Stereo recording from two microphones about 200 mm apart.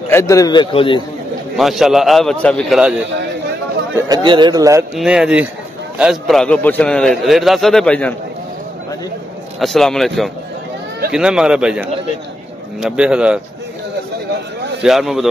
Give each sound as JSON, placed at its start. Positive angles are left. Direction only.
{"t": 0.1, "sound": "a man's voice", "side_deg": 15}
{"t": 1.6, "sound": "a man's voice", "side_deg": 0}
{"t": 3.9, "sound": "a man's voice", "side_deg": -20}
{"t": 4.9, "sound": "a man's voice", "side_deg": -5}
{"t": 9.6, "sound": "a man's voice", "side_deg": 0}
{"t": 14.8, "sound": "a man's voice", "side_deg": 0}